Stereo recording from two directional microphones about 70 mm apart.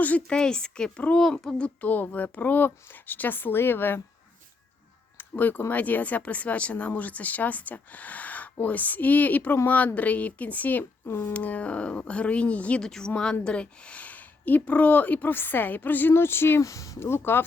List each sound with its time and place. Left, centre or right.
0.0 s a child's voice: left
0.3 s a child's voice: centre; by 4.0 s left
5.1 s a child's voice: left
11.3 s a child's voice: centre; by 16.6 s left
16.6 s speech: left
17.0 s speech: left